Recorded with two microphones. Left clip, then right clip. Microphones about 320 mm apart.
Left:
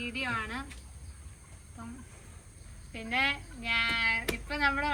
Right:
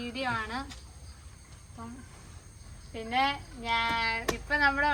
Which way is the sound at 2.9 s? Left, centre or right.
Centre.